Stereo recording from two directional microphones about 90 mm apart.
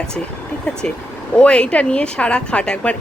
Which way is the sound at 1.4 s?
10° left (ahead or behind).